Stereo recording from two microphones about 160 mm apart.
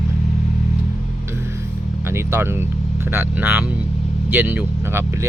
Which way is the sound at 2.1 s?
15° right (ahead or behind).